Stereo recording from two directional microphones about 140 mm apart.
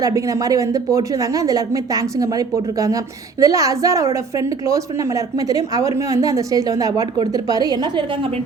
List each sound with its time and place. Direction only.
0.0 s a woman's voice: 25° right (ahead or behind)